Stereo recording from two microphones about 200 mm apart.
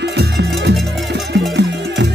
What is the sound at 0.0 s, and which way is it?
Music, 55° right (ahead or behind).